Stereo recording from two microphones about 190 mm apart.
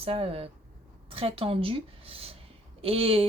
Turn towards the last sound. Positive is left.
turn(degrees=-30)  # may be behind; listen again after turning